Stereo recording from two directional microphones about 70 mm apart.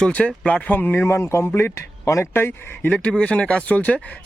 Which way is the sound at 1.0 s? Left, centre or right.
Left.